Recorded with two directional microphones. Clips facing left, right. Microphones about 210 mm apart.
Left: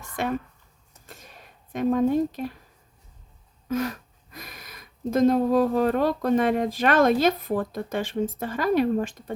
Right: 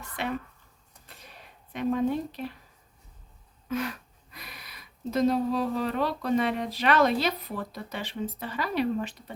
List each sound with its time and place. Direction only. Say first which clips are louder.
0.2 s speech: left 5 dB; 45° left (ahead or behind)
1.0 s a sound: left 5 dB; 45° left (ahead or behind)
1.7 s speech: left 5 dB; 45° left (ahead or behind)
3.7 s speech: left 4 dB; 40° left (ahead or behind)